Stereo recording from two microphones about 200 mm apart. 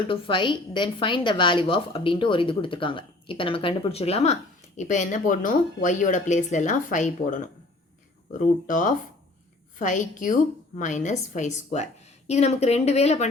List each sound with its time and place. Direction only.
0.1 s a woman's voice: 25° left (ahead or behind)